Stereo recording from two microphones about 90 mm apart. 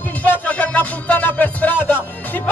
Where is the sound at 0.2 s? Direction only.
15° left (ahead or behind).